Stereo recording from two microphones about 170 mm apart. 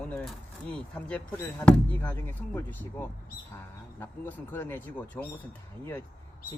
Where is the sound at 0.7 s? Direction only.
5° left (ahead or behind).